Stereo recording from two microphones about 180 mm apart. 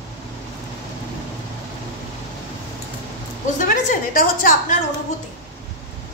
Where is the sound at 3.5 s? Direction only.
45° left (ahead or behind).